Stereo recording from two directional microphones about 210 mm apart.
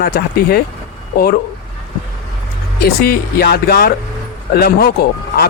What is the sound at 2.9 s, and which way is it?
Speech, 45° left (ahead or behind).